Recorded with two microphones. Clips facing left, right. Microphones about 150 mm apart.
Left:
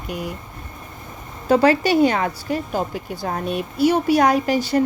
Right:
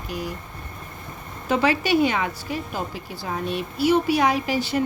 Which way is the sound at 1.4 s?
40° left (ahead or behind).